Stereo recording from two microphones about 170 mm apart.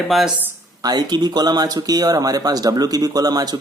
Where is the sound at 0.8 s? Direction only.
25° right (ahead or behind).